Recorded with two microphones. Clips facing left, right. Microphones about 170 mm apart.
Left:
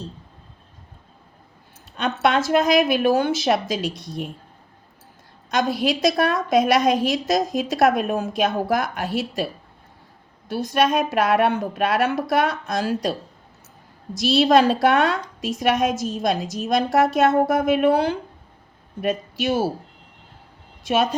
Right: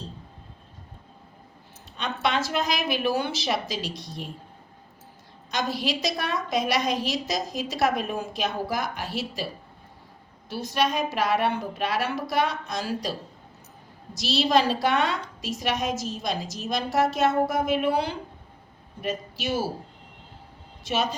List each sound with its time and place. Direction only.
2.2 s a woman's voice: 50° left (ahead or behind)
5.5 s a woman's voice: 50° left (ahead or behind)
10.5 s a woman's voice: 55° left (ahead or behind)
14.2 s a woman's voice: 55° left (ahead or behind)
20.8 s a woman's voice: 55° left (ahead or behind)